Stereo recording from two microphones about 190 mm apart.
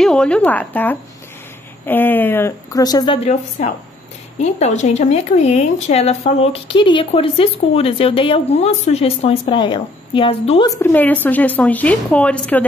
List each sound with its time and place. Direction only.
0.0 s speech: 5° left (ahead or behind); by 3.2 s 20° left (ahead or behind)
3.3 s speech: 35° left (ahead or behind)
10.7 s speech: 10° left (ahead or behind)